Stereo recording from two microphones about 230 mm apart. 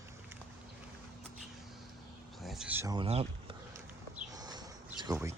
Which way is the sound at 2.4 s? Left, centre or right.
Centre.